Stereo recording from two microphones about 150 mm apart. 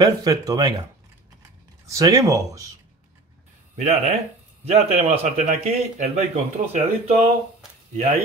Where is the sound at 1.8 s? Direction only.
20° right (ahead or behind).